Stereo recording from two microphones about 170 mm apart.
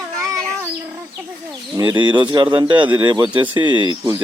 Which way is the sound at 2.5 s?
25° right (ahead or behind).